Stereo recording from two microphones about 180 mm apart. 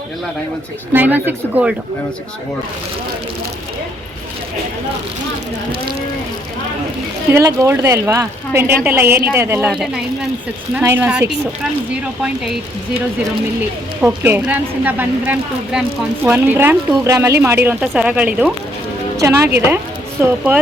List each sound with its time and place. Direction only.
0.9 s a woman's voice: 10° right (ahead or behind)
7.3 s a woman's voice: 15° right (ahead or behind)
13.6 s a woman's voice: 10° right (ahead or behind)